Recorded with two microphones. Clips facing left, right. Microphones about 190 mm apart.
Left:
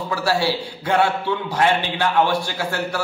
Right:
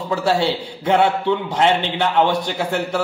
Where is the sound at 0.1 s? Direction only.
20° right (ahead or behind).